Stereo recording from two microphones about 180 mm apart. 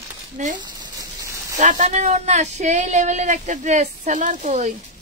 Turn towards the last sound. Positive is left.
turn(degrees=-40)  # may be behind; listen again after turning